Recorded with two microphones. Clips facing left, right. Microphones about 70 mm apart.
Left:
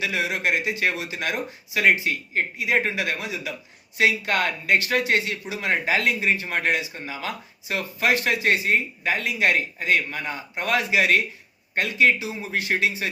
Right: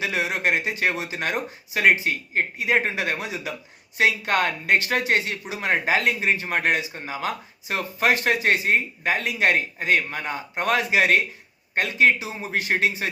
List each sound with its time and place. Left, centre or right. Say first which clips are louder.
0.0 s speech: right 1 dB; right